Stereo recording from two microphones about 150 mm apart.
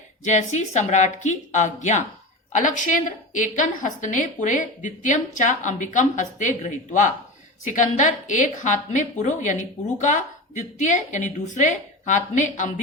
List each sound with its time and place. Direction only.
0.3 s a woman's voice: 50° left (ahead or behind)